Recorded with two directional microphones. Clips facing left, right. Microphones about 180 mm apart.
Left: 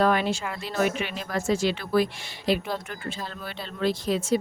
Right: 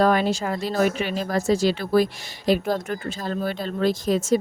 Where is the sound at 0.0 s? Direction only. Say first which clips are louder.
Right 3 dB; 40° right (ahead or behind).